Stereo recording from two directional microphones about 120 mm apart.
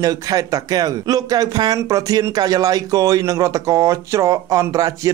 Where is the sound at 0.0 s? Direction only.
30° right (ahead or behind).